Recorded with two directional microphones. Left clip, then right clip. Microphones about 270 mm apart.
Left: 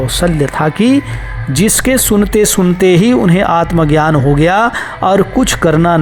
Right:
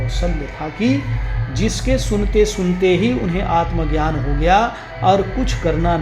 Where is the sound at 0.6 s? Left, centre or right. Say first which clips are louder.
Left 15 dB; left.